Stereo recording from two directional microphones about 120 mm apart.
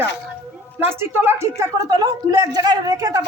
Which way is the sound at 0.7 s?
20° right (ahead or behind).